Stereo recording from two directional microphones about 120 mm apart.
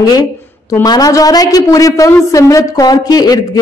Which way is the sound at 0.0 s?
30° left (ahead or behind).